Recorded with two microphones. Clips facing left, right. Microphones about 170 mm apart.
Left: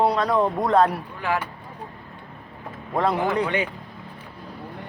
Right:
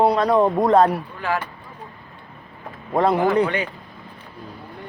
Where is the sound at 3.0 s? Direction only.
5° right (ahead or behind).